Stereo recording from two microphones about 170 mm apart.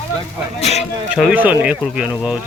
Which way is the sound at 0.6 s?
40° left (ahead or behind).